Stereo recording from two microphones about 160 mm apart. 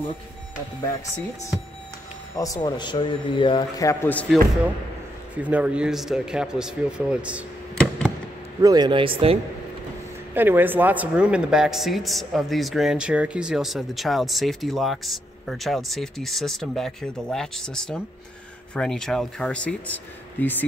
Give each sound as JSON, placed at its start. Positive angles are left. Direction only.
{"t": 2.3, "sound": "a man's voice", "side_deg": 20}
{"t": 5.4, "sound": "speech", "side_deg": -10}
{"t": 7.7, "sound": "a sound", "side_deg": 5}
{"t": 8.5, "sound": "speech", "side_deg": -25}
{"t": 10.3, "sound": "speech", "side_deg": -10}